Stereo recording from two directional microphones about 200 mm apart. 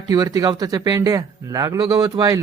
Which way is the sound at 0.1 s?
20° right (ahead or behind).